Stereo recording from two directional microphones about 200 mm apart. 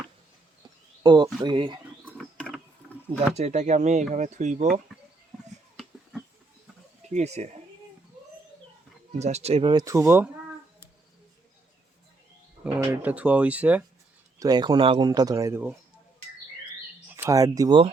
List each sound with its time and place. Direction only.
1.0 s speech: 20° right (ahead or behind)
2.4 s mechanisms: 5° left (ahead or behind)
3.3 s speech: 35° right (ahead or behind)
7.1 s speech: 35° right (ahead or behind)
9.1 s speech: 35° right (ahead or behind); by 10.3 s 10° right (ahead or behind)
12.7 s speech: 10° right (ahead or behind)
14.3 s speech: 20° right (ahead or behind)
17.1 s speech: 10° right (ahead or behind)